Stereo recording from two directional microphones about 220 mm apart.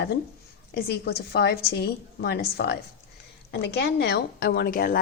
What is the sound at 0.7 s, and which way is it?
A woman's voice, 45° left (ahead or behind).